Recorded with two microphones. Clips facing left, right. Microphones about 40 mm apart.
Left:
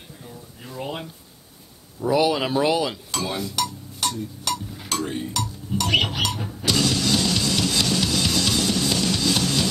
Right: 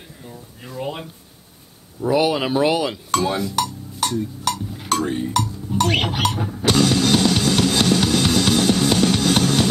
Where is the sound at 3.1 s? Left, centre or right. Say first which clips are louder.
Right 9 dB; right.